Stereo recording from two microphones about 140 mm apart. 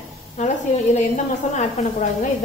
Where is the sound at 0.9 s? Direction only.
65° left (ahead or behind).